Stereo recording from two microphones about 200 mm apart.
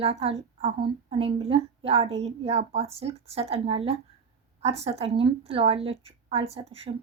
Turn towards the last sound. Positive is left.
turn(degrees=-30)  # may be behind; listen again after turning